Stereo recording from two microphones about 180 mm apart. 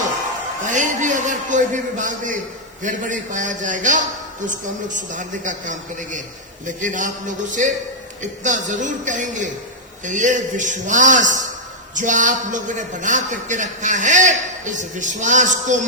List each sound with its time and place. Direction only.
0.7 s a man's voice: 45° right (ahead or behind)